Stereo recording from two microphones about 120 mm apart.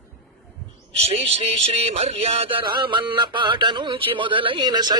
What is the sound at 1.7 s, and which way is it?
Music, 60° right (ahead or behind).